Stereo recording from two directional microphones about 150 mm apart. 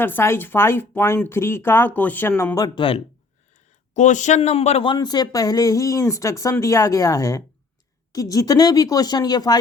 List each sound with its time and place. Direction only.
0.0 s speech: 15° left (ahead or behind)
2.6 s speech: 25° left (ahead or behind)
3.9 s a man's voice: 55° left (ahead or behind)
4.9 s speech: 25° left (ahead or behind)